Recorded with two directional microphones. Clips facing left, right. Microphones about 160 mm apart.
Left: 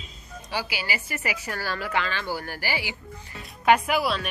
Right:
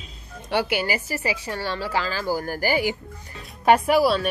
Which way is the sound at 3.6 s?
35° right (ahead or behind).